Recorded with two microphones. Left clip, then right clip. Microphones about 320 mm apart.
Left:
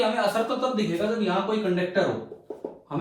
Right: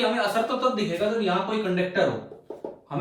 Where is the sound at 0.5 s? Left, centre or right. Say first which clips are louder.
Right 2 dB; centre.